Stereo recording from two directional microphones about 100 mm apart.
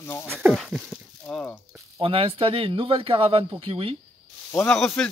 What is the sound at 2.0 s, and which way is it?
Speech, 65° right (ahead or behind).